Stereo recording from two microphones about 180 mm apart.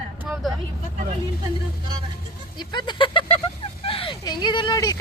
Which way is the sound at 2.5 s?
25° left (ahead or behind).